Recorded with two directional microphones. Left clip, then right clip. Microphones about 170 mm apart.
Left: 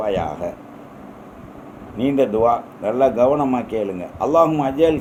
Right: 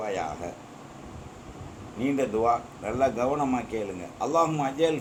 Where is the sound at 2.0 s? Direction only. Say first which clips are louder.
Left 9 dB; 60° left (ahead or behind).